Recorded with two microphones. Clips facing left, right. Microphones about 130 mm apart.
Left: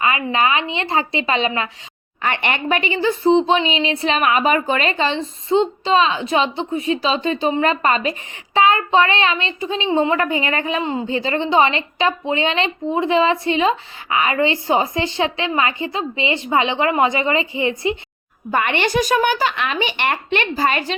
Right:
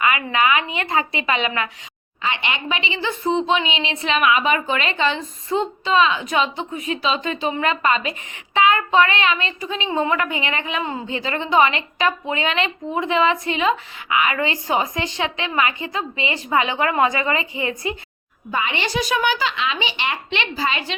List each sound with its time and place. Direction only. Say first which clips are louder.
0.0 s a woman's voice: left 1 dB; 30° left (ahead or behind)
2.2 s a woman's voice: left 4 dB; 55° left (ahead or behind); by 17.9 s 25° left (ahead or behind)
18.5 s speech: left 5 dB; 60° left (ahead or behind)